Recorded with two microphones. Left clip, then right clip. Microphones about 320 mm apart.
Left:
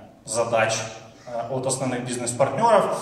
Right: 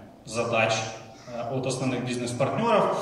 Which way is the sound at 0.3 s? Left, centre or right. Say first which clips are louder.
Left 3 dB; left.